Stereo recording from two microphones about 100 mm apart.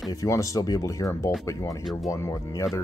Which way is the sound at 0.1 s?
35° left (ahead or behind).